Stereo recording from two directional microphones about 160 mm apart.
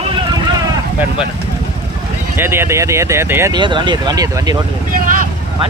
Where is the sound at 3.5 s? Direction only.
30° right (ahead or behind).